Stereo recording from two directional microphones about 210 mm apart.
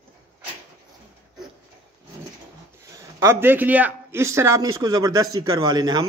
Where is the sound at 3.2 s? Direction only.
10° right (ahead or behind).